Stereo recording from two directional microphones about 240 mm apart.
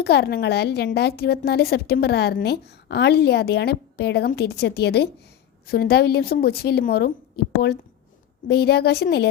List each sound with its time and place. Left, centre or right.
0.0 s a woman's voice: left